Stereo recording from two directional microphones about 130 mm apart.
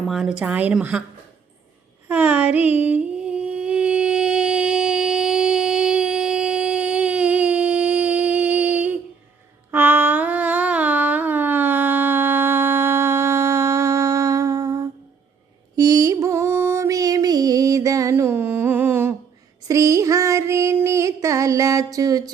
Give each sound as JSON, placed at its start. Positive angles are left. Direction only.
{"t": 0.1, "sound": "a woman's voice", "side_deg": -5}
{"t": 2.0, "sound": "mantra", "side_deg": -10}
{"t": 9.7, "sound": "a sound", "side_deg": -15}
{"t": 15.7, "sound": "mantra", "side_deg": -30}
{"t": 19.6, "sound": "child singing", "side_deg": -25}